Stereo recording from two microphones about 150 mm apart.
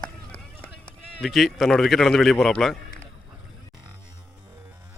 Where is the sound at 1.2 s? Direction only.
Centre (ahead or behind).